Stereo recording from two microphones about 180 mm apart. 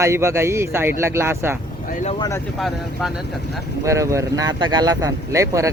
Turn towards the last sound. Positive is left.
turn(degrees=-15)  # may be behind; listen again after turning